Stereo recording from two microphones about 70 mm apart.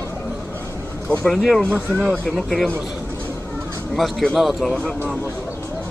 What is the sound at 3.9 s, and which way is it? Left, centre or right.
Speech, centre.